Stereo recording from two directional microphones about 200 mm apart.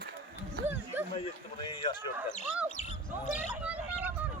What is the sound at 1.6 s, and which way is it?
Speech, 20° left (ahead or behind).